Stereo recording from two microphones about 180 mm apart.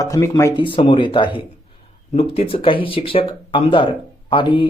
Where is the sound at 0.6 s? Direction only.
30° left (ahead or behind).